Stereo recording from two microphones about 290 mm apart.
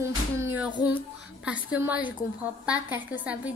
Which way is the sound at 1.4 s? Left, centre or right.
Centre.